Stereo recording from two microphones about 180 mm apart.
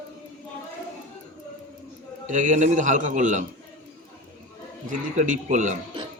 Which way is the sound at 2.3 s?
45° right (ahead or behind).